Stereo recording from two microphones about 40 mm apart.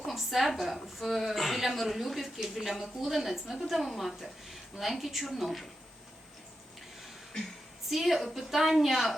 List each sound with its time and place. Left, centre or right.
0.1 s a woman's voice: centre
7.9 s a woman's voice: centre